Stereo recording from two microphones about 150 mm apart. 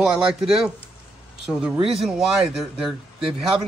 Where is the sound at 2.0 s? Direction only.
5° right (ahead or behind).